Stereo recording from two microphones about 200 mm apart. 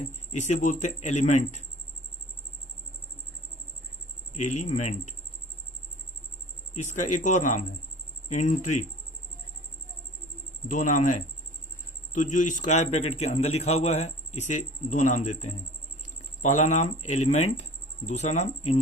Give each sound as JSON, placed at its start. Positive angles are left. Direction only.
{"t": 0.0, "sound": "a man's voice", "side_deg": 35}
{"t": 4.5, "sound": "a man's voice", "side_deg": 35}
{"t": 6.9, "sound": "a man's voice", "side_deg": 40}
{"t": 10.7, "sound": "a man's voice", "side_deg": 40}